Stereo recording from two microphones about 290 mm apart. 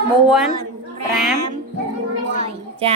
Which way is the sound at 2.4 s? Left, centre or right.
Centre.